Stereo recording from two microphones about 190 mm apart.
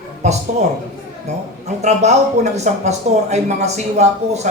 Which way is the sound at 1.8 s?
35° right (ahead or behind).